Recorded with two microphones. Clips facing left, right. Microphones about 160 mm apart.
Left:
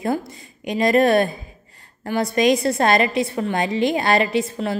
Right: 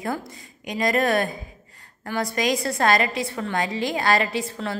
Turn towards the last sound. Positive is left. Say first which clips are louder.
# left 6 dB
turn(degrees=20)  # may be behind; listen again after turning